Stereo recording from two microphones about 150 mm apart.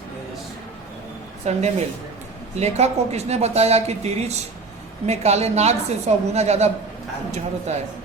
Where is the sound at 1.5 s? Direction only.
50° right (ahead or behind).